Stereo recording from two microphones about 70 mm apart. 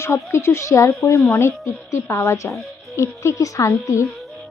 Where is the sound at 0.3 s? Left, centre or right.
Left.